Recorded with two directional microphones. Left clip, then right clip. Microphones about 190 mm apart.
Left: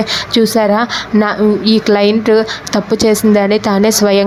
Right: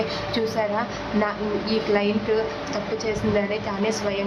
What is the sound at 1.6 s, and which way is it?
Speech, 45° left (ahead or behind).